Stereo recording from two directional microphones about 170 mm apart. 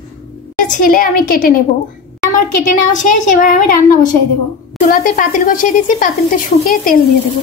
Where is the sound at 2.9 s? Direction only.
45° left (ahead or behind).